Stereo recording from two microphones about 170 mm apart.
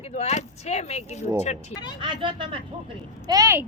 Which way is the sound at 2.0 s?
30° right (ahead or behind).